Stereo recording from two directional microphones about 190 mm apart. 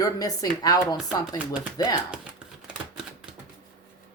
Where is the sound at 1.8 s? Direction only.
20° left (ahead or behind).